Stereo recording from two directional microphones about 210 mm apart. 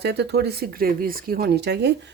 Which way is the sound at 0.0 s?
50° right (ahead or behind).